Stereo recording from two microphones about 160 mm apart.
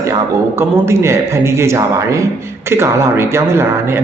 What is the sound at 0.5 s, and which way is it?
Speech, 15° right (ahead or behind).